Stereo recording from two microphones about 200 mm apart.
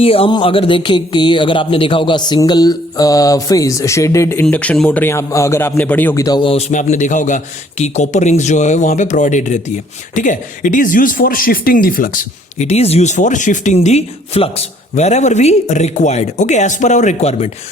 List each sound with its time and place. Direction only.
0.0 s speech: 30° left (ahead or behind); by 12.6 s 45° left (ahead or behind)
12.6 s speech: 30° left (ahead or behind)